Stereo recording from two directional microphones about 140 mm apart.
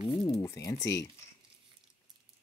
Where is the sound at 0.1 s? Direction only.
25° left (ahead or behind).